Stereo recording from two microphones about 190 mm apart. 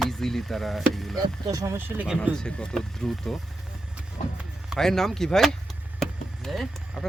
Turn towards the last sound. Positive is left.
turn(degrees=0)  # may be behind; listen again after turning